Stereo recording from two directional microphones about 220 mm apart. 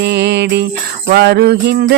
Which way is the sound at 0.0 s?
50° right (ahead or behind).